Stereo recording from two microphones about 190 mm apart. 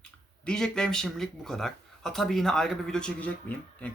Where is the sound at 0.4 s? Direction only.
5° left (ahead or behind).